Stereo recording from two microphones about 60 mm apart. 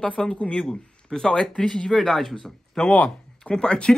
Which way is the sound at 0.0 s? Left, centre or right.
Centre.